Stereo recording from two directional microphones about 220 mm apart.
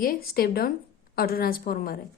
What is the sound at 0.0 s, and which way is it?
A woman's voice, 40° left (ahead or behind).